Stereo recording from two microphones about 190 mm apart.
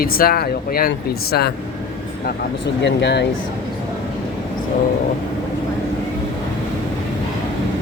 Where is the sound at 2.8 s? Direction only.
65° left (ahead or behind).